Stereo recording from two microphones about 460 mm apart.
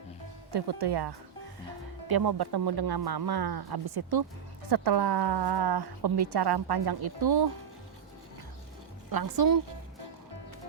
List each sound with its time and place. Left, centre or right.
0.5 s a woman's voice: right
9.0 s speech: right